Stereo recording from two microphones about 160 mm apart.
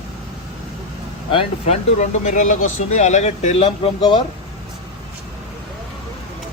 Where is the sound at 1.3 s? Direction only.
40° left (ahead or behind).